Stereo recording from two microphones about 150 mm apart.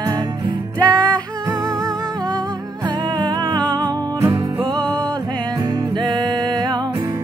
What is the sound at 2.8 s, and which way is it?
Music, 30° right (ahead or behind).